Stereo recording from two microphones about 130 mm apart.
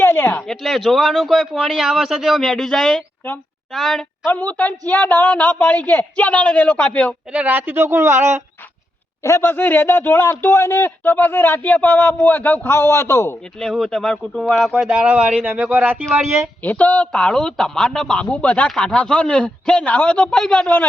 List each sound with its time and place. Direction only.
0.0 s a sound: 15° left (ahead or behind)
0.4 s speech: 5° left (ahead or behind)
4.3 s speech: 15° left (ahead or behind)
7.3 s speech: 15° right (ahead or behind)
9.2 s speech: 20° left (ahead or behind)
13.6 s speech: 5° left (ahead or behind); by 16.5 s 20° right (ahead or behind)
16.6 s speech: 10° left (ahead or behind)